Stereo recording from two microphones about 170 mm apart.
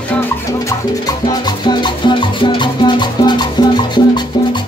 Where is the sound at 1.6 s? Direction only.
25° left (ahead or behind).